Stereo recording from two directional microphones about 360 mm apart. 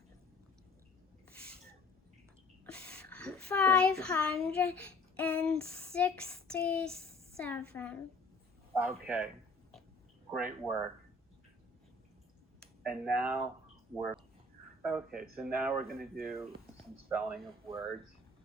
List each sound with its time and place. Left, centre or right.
2.6 s speech: centre
8.7 s speech: centre
10.3 s speech: centre
12.5 s speech: centre
14.8 s speech: centre